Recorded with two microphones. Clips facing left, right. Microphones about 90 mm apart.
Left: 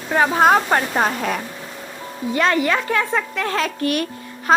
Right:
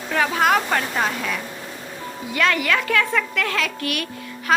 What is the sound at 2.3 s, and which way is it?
A woman's voice, 30° left (ahead or behind).